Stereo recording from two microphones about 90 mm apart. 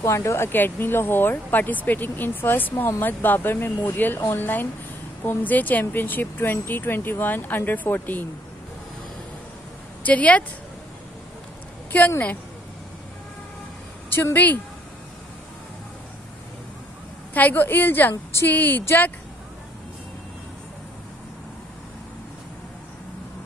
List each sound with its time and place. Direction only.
0.0 s speech: 30° left (ahead or behind)
10.0 s a woman's voice: 15° left (ahead or behind)
14.1 s speech: 20° left (ahead or behind)
17.3 s speech: 20° left (ahead or behind)